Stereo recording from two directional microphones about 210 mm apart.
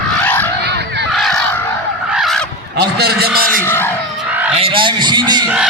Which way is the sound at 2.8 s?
50° right (ahead or behind).